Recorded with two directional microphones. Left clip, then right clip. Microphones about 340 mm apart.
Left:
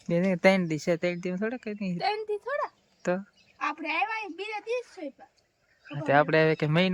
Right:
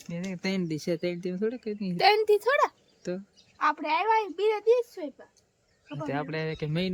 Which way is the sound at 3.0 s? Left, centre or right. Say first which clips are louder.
Left 6 dB; centre.